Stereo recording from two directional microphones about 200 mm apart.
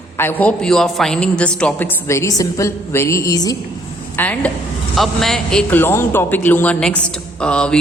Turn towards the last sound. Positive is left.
turn(degrees=5)  # may be behind; listen again after turning